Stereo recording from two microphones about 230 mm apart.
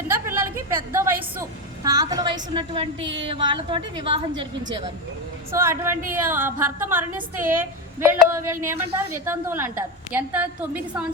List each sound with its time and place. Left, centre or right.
0.1 s a sound: centre
0.9 s a woman's voice: centre
5.5 s a woman's voice: centre